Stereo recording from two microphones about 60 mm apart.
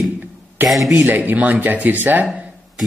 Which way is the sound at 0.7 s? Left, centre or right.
Centre.